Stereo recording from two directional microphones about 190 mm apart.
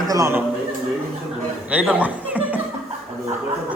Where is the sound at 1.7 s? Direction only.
10° right (ahead or behind).